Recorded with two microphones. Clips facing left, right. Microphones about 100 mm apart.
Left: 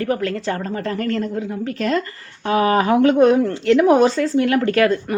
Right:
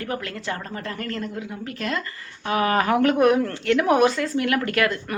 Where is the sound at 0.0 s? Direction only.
35° left (ahead or behind).